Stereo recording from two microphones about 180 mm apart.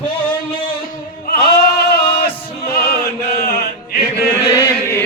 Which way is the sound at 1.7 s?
60° left (ahead or behind).